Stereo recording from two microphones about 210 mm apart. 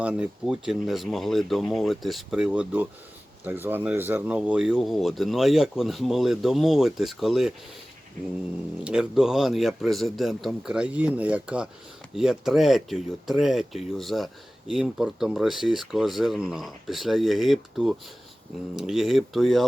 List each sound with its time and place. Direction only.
0.0 s speech: 5° right (ahead or behind)
8.8 s speech: 5° right (ahead or behind)